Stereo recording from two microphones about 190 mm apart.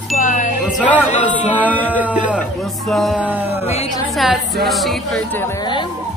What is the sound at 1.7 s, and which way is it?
Speech, 10° left (ahead or behind).